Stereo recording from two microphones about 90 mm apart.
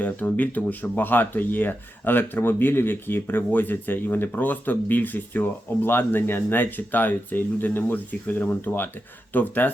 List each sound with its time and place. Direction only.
0.0 s speech: 15° left (ahead or behind)